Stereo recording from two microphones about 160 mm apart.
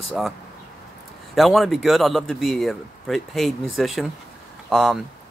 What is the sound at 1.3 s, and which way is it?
Speech, centre (ahead or behind).